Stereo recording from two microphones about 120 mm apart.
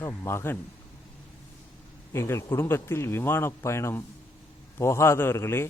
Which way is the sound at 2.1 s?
20° left (ahead or behind).